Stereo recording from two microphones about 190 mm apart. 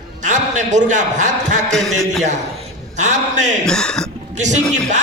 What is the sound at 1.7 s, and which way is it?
Speech, centre (ahead or behind).